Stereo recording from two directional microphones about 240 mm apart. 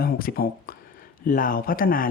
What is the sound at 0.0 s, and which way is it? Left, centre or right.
Speech, left.